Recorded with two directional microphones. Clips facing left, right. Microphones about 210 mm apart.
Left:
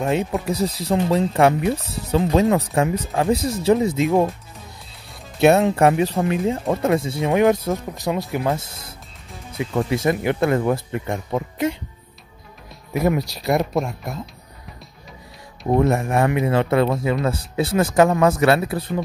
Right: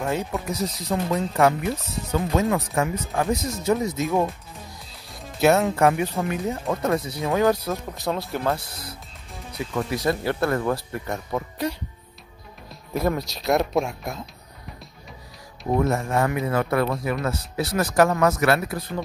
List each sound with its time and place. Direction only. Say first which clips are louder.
0.0 s speech: left 5 dB; 25° left (ahead or behind)
5.4 s speech: left 4 dB; 25° left (ahead or behind)
13.0 s speech: left 5 dB; 15° left (ahead or behind)
13.5 s speech: left 1 dB; centre (ahead or behind)
15.7 s speech: left 4 dB; 25° left (ahead or behind)